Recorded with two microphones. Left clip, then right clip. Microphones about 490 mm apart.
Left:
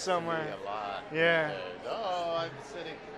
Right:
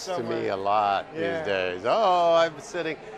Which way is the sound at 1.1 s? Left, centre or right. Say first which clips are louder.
Left 2 dB; left.